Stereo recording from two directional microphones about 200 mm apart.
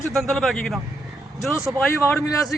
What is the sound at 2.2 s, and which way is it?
Speech, 15° left (ahead or behind).